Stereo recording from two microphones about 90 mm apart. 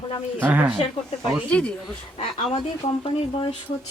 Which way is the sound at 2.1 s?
90° left.